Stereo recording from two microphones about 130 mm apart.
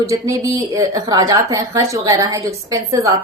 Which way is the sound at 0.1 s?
25° right (ahead or behind).